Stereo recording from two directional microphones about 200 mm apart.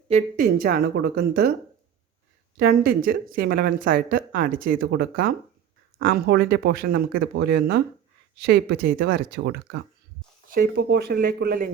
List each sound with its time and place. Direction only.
0.1 s speech: 40° right (ahead or behind)
2.6 s speech: 50° right (ahead or behind)